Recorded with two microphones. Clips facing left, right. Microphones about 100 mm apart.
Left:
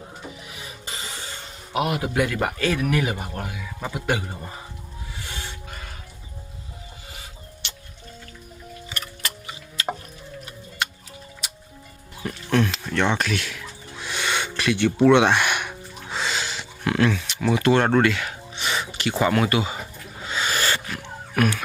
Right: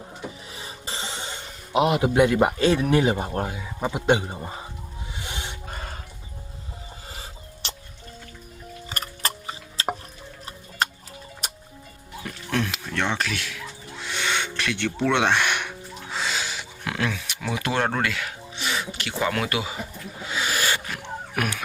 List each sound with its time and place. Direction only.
0.5 s cough: 30° right (ahead or behind)
1.7 s a man's voice: 20° right (ahead or behind)
5.2 s train: 20° right (ahead or behind)
5.6 s a sound: 35° right (ahead or behind)
7.1 s music: 35° right (ahead or behind)
8.9 s tick-tock: 40° right (ahead or behind)
10.8 s music: 40° right (ahead or behind)
12.5 s music: centre (ahead or behind)
20.2 s owl: 5° right (ahead or behind)
21.3 s a sound: 15° right (ahead or behind)